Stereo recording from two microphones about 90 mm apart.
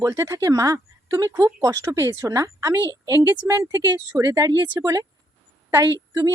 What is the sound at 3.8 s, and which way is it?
Speech, 45° right (ahead or behind).